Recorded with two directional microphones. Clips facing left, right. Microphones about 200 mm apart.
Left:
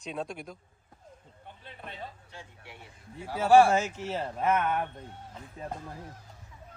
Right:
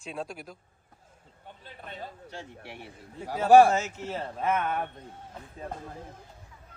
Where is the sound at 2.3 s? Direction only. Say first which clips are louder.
Right 6 dB; 75° right (ahead or behind).